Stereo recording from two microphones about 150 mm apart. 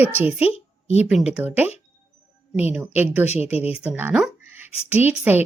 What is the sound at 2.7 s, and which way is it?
A woman's voice, 15° right (ahead or behind).